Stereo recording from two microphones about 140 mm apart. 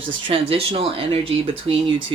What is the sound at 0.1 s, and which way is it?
Speech, 40° right (ahead or behind).